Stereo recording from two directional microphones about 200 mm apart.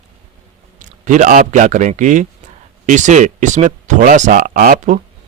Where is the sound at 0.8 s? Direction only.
40° right (ahead or behind).